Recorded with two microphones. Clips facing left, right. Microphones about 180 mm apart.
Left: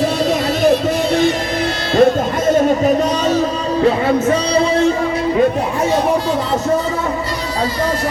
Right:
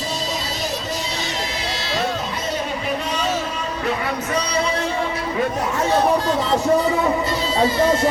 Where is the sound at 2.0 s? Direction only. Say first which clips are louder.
Left 15 dB; 50° left (ahead or behind).